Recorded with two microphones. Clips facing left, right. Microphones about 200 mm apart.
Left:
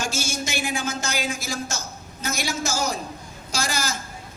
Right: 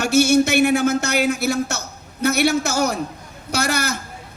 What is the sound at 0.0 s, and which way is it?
Speech, 65° right (ahead or behind).